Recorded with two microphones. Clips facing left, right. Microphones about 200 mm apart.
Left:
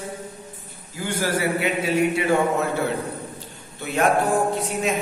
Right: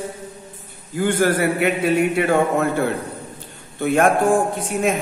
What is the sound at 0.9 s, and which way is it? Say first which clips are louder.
Speech: right 7 dB; 55° right (ahead or behind).